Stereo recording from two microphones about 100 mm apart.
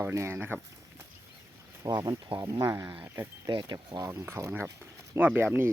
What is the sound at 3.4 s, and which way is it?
Speech, 45° right (ahead or behind).